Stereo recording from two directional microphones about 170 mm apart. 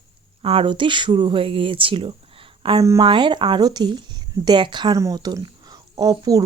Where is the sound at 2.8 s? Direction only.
20° right (ahead or behind).